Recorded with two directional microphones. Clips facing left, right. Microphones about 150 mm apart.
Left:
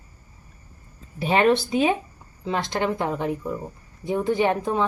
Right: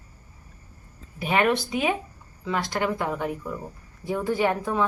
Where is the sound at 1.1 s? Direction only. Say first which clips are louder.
Left 3 dB; 30° left (ahead or behind).